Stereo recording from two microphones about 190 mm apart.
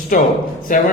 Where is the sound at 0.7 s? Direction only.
45° left (ahead or behind).